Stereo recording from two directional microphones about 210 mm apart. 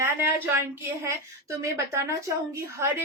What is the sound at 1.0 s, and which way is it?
A woman's voice, 15° right (ahead or behind).